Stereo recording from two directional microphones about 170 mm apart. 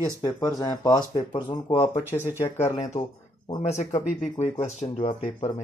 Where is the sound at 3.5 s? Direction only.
35° left (ahead or behind).